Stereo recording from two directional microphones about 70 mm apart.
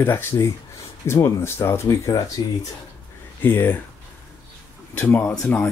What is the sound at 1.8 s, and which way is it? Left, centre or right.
Speech, left.